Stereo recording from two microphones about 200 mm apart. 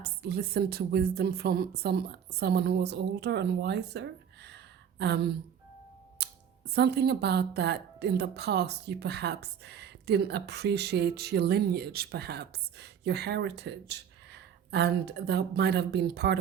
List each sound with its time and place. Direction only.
0.0 s a woman's voice: 55° right (ahead or behind)
6.2 s a sound: 55° right (ahead or behind)
6.7 s a woman's voice: 55° right (ahead or behind)